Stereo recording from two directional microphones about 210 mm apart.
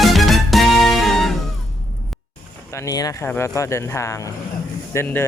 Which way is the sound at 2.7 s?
15° left (ahead or behind).